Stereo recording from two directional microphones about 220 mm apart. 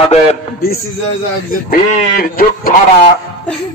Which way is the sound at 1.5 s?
40° left (ahead or behind).